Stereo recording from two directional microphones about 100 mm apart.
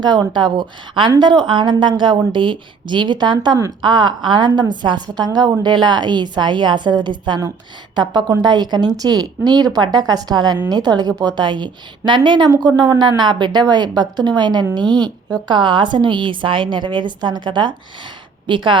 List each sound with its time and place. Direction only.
0.0 s a woman's voice: 45° right (ahead or behind)